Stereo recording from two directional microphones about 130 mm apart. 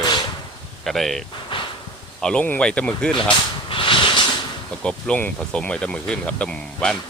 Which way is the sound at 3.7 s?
45° left (ahead or behind).